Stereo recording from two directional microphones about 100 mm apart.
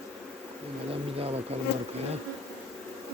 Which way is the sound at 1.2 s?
75° right (ahead or behind).